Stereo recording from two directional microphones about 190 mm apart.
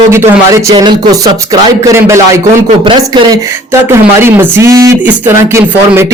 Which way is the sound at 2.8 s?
25° right (ahead or behind).